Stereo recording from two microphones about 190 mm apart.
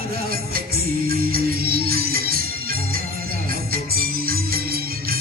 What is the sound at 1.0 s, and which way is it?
Music, 50° right (ahead or behind).